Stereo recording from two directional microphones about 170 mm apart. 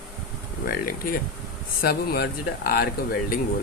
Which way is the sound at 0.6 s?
60° left (ahead or behind).